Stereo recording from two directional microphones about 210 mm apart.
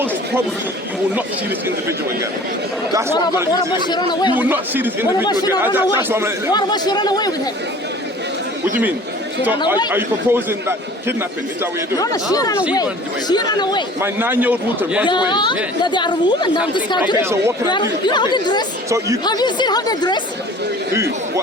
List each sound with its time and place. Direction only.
3.8 s speech: 20° left (ahead or behind)
4.4 s a man's voice: 10° right (ahead or behind)
5.2 s speech: 20° left (ahead or behind)
5.5 s a man's voice: 10° right (ahead or behind)
6.5 s speech: 20° left (ahead or behind)
9.9 s a man's voice: 10° right (ahead or behind)
11.9 s speech: 15° left (ahead or behind)
14.0 s a man's voice: 10° right (ahead or behind)
15.0 s speech: 20° left (ahead or behind)
17.7 s speech: 20° left (ahead or behind)
18.9 s a man's voice: 15° right (ahead or behind)
19.2 s speech: 20° left (ahead or behind)
20.9 s a sound: 15° right (ahead or behind)